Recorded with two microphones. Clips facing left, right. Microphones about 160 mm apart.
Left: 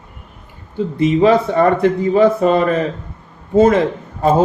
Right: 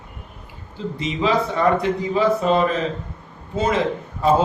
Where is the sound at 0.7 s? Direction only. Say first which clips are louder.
Left 11 dB; 55° left (ahead or behind).